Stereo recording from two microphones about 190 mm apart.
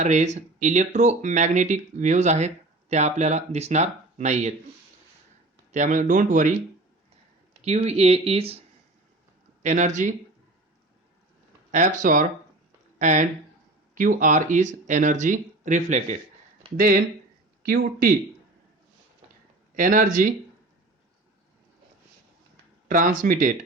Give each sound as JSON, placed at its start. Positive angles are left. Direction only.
{"t": 0.0, "sound": "speech", "side_deg": -35}
{"t": 5.7, "sound": "speech", "side_deg": -40}
{"t": 7.6, "sound": "speech", "side_deg": -35}
{"t": 9.6, "sound": "speech", "side_deg": -40}
{"t": 11.7, "sound": "speech", "side_deg": -40}
{"t": 19.7, "sound": "speech", "side_deg": -45}
{"t": 22.9, "sound": "speech", "side_deg": -45}